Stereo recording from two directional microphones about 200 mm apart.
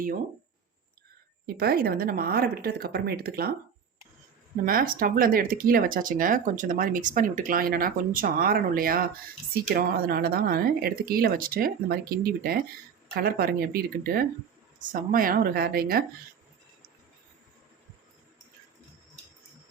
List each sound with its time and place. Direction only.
1.5 s speech: 50° right (ahead or behind)
4.6 s speech: 45° right (ahead or behind)